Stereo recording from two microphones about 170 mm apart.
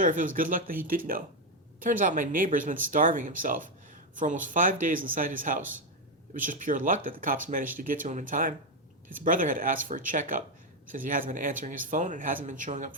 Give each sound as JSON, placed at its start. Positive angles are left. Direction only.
{"t": 0.0, "sound": "speech", "side_deg": -50}